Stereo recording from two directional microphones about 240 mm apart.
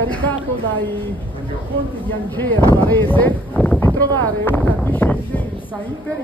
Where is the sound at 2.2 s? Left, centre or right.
Centre.